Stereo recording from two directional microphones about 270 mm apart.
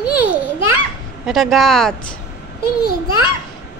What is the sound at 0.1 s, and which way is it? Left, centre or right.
Children playing, left.